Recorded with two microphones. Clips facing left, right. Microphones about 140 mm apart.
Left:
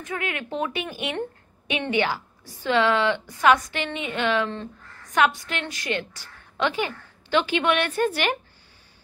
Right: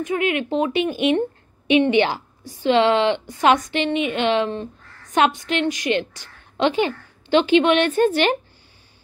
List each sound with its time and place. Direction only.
0.0 s a woman's voice: 20° right (ahead or behind)